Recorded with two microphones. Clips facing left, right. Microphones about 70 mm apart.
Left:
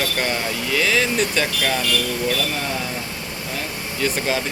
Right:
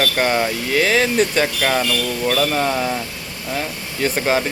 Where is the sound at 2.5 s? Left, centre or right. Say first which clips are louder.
Right 6 dB; right.